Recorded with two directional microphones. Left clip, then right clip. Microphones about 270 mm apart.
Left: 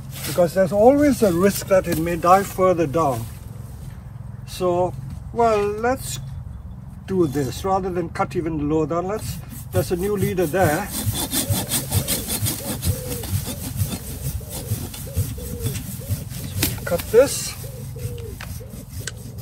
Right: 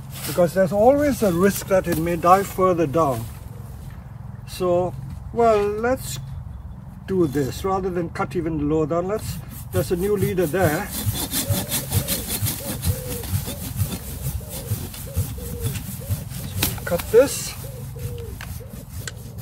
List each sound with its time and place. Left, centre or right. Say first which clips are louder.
0.2 s speech: left 1 dB; centre
4.6 s speech: even; centre
7.1 s speech: even; centre
9.7 s sawing: even; centre
13.0 s a sound: left 1 dB; centre
13.5 s rub: left 1 dB; centre
15.1 s a sound: even; centre
16.1 s vehicle: left 1 dB; centre